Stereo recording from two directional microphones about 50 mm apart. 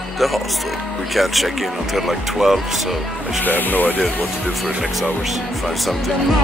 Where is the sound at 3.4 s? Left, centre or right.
Left.